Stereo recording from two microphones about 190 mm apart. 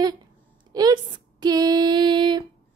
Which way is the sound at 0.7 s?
20° right (ahead or behind).